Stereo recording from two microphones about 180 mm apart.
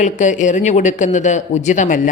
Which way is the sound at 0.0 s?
45° left (ahead or behind).